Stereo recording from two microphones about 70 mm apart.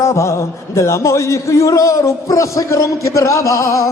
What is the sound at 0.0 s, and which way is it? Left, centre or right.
A man's voice, left.